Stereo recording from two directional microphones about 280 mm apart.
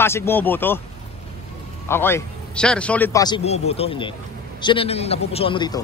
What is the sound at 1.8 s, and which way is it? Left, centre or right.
A man's voice, centre.